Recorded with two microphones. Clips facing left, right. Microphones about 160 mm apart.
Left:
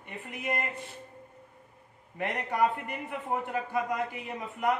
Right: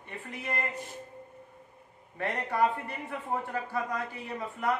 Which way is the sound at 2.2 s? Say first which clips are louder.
Even; 20° left (ahead or behind).